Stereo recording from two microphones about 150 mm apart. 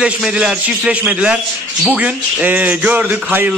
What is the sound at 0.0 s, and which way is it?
Speech, 5° right (ahead or behind).